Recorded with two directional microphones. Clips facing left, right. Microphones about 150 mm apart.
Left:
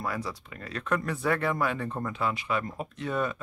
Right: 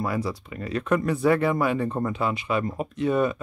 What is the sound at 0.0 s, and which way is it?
Speech, 10° right (ahead or behind).